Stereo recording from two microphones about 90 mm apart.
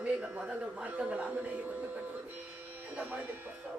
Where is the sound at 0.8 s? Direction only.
15° right (ahead or behind).